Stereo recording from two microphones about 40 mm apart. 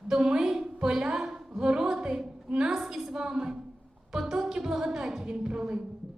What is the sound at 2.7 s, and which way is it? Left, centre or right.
A woman's voice, centre.